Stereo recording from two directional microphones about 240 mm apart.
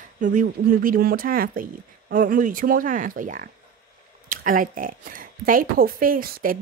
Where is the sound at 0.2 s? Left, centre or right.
Right.